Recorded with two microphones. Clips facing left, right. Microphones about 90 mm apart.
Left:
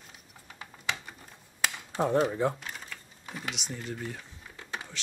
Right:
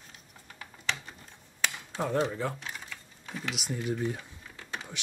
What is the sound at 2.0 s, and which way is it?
Speech, 15° left (ahead or behind).